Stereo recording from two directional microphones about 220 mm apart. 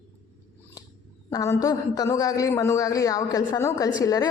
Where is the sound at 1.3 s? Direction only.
15° left (ahead or behind).